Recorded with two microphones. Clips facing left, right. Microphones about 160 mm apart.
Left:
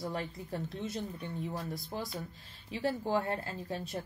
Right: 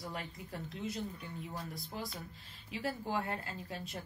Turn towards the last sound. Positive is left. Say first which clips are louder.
# left 5 dB
turn(degrees=30)  # may be behind; listen again after turning